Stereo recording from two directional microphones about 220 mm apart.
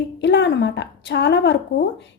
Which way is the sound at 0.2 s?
55° left (ahead or behind).